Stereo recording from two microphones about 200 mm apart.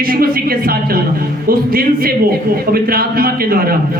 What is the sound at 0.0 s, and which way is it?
A man's voice, 45° right (ahead or behind).